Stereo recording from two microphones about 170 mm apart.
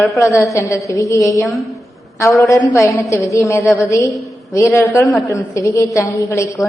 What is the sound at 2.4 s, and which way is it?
A woman's voice, 20° left (ahead or behind).